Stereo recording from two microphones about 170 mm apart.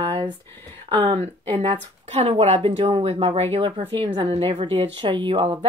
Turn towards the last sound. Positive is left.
turn(degrees=-30)  # may be behind; listen again after turning